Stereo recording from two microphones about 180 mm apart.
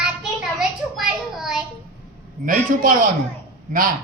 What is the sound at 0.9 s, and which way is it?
Child singing, 5° right (ahead or behind).